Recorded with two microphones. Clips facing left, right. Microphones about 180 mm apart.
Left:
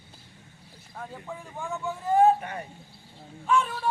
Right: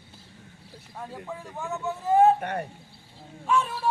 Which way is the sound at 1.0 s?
5° right (ahead or behind).